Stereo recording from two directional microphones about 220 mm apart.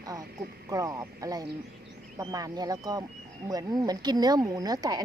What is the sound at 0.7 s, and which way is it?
Speech, 15° right (ahead or behind).